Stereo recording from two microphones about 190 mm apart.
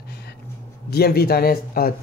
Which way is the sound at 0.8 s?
55° left (ahead or behind).